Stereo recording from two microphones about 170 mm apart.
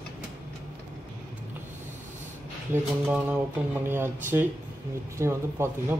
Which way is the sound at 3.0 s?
10° right (ahead or behind).